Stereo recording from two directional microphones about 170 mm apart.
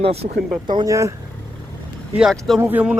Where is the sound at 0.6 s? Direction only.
25° right (ahead or behind).